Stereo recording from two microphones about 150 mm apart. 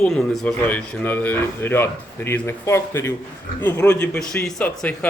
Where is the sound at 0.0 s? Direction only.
10° left (ahead or behind).